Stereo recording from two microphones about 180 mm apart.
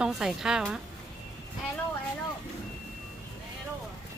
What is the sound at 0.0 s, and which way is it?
Speech, centre (ahead or behind).